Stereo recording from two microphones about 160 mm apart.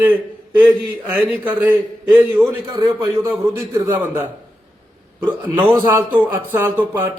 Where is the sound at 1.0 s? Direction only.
10° right (ahead or behind).